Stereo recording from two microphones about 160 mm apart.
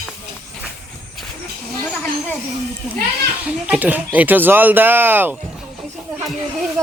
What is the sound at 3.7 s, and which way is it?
Speech, 10° right (ahead or behind).